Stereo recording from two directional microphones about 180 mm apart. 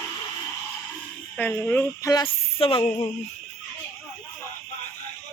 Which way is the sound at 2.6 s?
30° left (ahead or behind).